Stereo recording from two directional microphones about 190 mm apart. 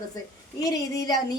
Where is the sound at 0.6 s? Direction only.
20° left (ahead or behind).